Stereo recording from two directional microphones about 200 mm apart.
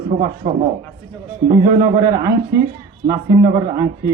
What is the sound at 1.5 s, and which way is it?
Speech, 20° right (ahead or behind).